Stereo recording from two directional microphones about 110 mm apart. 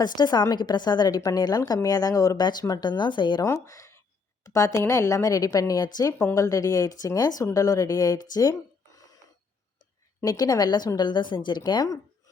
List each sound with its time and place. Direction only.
0.0 s a woman's voice: 40° left (ahead or behind)
3.4 s a woman's voice: 30° left (ahead or behind)
10.2 s a woman's voice: 35° left (ahead or behind)